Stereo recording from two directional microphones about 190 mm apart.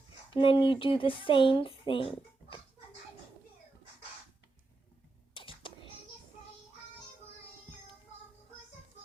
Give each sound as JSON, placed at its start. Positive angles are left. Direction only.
{"t": 0.3, "sound": "speech", "side_deg": 25}
{"t": 5.3, "sound": "whispering", "side_deg": 25}